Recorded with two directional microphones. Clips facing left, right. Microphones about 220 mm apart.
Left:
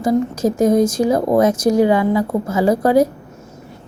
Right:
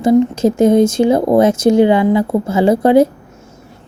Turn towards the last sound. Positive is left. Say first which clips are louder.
# right 4 dB
turn(degrees=-25)  # may be behind; listen again after turning